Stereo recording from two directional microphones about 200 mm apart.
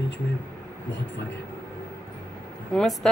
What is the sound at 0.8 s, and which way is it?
Speech, 60° left (ahead or behind).